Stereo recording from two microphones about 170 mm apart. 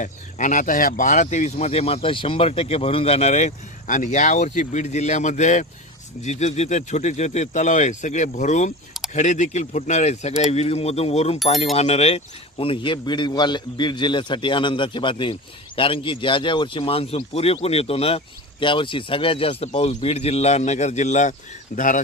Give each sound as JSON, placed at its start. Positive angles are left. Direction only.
{"t": 0.0, "sound": "speech", "side_deg": 45}